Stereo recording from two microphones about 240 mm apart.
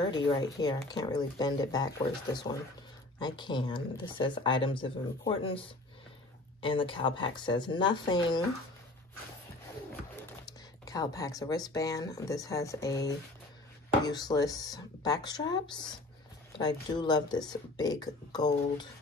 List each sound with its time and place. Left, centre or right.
0.3 s speech: centre
10.9 s speech: centre